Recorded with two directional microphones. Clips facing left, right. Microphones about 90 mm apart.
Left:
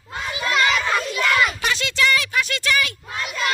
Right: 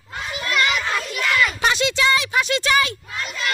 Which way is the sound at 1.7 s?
20° right (ahead or behind).